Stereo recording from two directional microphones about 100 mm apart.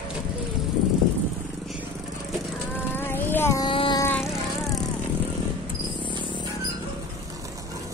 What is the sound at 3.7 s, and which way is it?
Vehicle, 60° left (ahead or behind).